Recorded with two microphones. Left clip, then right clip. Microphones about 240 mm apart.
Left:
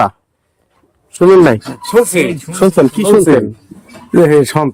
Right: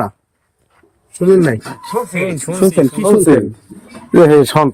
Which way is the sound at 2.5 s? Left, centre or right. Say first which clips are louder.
Right 1 dB; right.